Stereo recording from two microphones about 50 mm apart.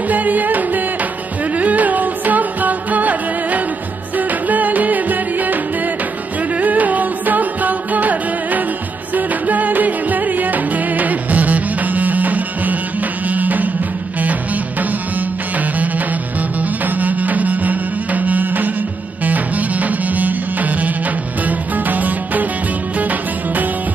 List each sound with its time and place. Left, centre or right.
0.1 s music: right